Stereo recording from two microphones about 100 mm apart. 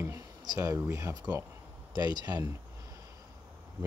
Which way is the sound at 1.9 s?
40° right (ahead or behind).